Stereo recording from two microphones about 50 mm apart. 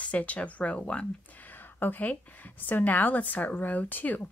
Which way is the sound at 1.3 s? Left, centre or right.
Left.